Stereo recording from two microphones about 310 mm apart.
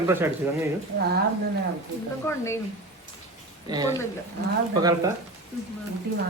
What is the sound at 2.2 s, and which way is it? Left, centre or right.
Speech, centre.